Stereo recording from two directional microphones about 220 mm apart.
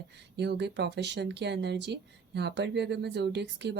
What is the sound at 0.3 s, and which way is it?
Speech, 50° right (ahead or behind).